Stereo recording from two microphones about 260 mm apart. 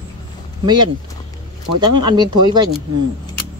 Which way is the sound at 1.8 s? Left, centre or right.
Centre.